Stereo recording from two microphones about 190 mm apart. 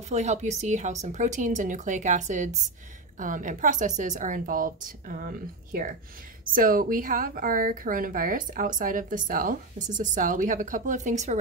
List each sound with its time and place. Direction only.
0.1 s a woman's voice: 35° right (ahead or behind)